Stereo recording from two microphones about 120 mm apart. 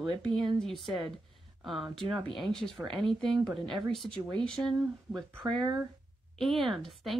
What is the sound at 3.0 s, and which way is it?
Speech, 40° right (ahead or behind).